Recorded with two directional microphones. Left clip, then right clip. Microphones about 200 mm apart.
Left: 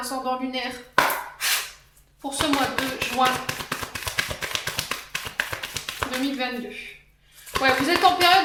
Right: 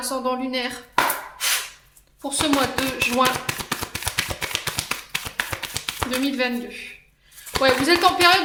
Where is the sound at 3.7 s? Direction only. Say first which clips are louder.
Right 2 dB; 40° right (ahead or behind).